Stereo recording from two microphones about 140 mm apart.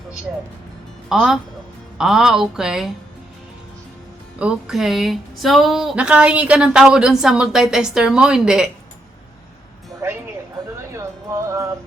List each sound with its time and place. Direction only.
1.1 s music: 5° right (ahead or behind)
4.4 s music: 5° right (ahead or behind)
10.9 s music: 20° right (ahead or behind)